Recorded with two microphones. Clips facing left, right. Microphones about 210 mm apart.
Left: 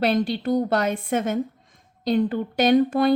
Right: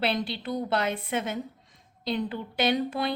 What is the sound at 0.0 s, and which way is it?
A woman's voice, 45° left (ahead or behind).